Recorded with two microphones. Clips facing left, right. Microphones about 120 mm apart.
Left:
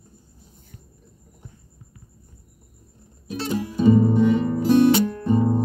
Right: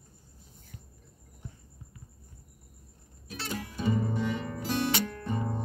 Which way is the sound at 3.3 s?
25° left (ahead or behind).